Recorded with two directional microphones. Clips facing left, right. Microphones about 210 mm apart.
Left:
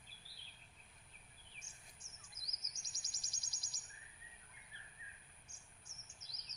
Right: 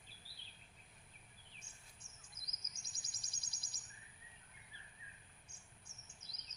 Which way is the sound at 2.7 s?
60° right (ahead or behind).